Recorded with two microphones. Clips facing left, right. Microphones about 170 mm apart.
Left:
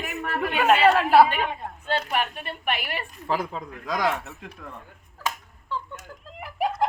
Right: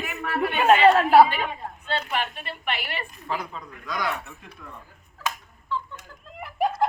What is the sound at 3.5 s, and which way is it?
Speech, 90° left.